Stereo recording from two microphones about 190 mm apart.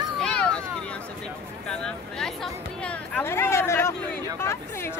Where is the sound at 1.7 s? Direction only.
5° left (ahead or behind).